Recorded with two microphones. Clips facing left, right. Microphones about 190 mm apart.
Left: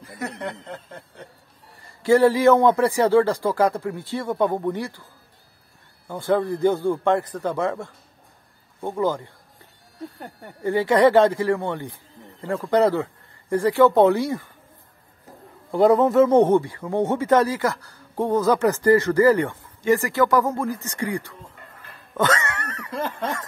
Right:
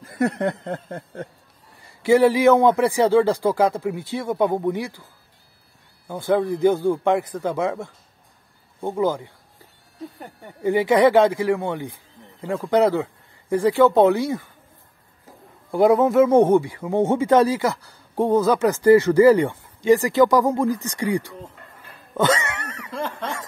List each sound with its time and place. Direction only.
0.0 s snicker: 50° right (ahead or behind)
2.0 s speech: 15° right (ahead or behind)
6.0 s speech: 10° right (ahead or behind)
10.1 s speech: centre (ahead or behind)
10.6 s speech: 15° right (ahead or behind)
15.7 s speech: 5° right (ahead or behind)
17.0 s speech: 25° right (ahead or behind)
17.3 s speech: 15° right (ahead or behind)
22.1 s cat: 15° right (ahead or behind)